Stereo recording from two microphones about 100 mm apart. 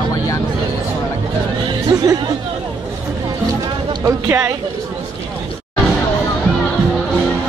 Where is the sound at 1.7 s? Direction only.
40° right (ahead or behind).